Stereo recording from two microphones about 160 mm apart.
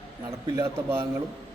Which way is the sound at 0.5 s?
15° right (ahead or behind).